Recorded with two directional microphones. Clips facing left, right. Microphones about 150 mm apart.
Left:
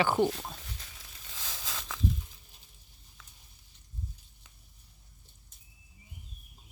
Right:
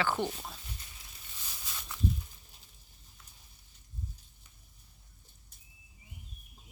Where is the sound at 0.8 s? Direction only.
90° left.